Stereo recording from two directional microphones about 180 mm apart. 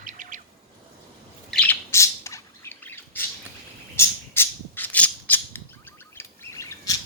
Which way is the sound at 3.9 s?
15° left (ahead or behind).